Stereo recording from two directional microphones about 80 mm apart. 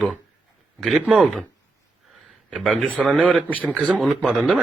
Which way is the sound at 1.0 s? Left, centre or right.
Centre.